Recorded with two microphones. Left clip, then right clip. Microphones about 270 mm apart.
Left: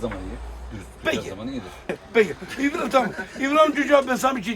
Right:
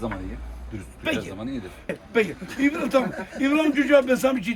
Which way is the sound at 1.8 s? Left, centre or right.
Centre.